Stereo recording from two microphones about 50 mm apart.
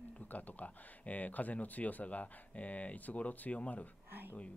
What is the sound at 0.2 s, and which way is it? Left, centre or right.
Speech, left.